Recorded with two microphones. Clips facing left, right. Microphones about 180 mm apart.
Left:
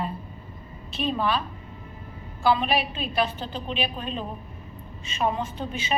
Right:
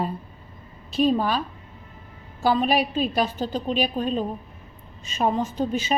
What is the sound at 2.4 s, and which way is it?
A woman's voice, 40° right (ahead or behind).